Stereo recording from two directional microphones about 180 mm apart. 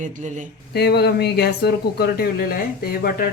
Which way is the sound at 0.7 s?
65° left (ahead or behind).